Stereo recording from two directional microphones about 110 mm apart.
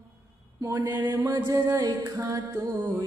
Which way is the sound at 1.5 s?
30° right (ahead or behind).